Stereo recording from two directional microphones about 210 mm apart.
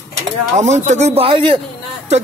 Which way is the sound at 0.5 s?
35° right (ahead or behind).